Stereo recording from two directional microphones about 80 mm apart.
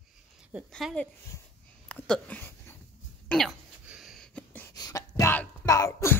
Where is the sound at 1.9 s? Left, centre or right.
Centre.